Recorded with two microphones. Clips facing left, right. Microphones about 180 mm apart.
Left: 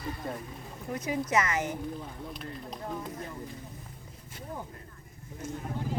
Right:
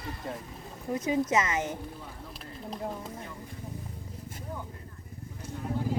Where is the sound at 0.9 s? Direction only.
25° right (ahead or behind).